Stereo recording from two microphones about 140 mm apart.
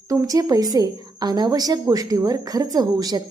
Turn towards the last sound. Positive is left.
turn(degrees=-30)  # may be behind; listen again after turning